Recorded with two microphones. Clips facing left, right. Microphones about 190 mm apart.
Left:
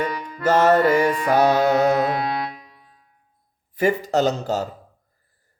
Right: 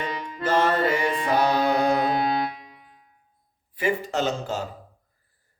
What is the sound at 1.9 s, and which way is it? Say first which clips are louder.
Music: left 2 dB; 25° right (ahead or behind).